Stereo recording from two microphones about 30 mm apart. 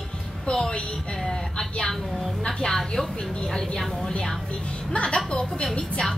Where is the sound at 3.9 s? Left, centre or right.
Left.